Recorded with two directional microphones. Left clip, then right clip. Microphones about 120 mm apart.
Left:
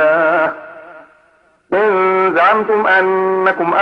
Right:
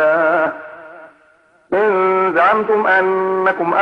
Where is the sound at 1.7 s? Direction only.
20° left (ahead or behind).